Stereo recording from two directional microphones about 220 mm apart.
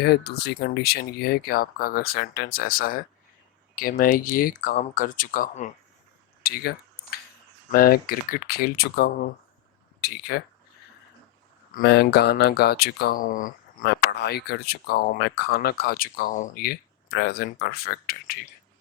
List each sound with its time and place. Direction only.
0.0 s speech: 45° left (ahead or behind)
11.7 s speech: 45° left (ahead or behind)